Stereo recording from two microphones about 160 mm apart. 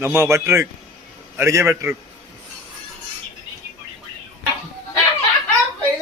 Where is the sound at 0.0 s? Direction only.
15° right (ahead or behind).